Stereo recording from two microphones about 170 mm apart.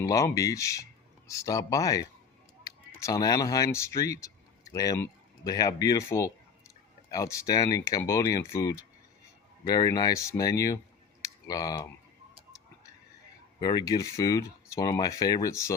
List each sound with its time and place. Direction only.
0.0 s speech: 20° left (ahead or behind)
13.6 s speech: 20° left (ahead or behind)